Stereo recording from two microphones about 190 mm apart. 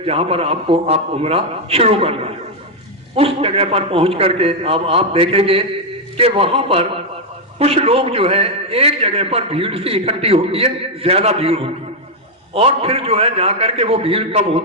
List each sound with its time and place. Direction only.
0.0 s a man's voice: 30° right (ahead or behind)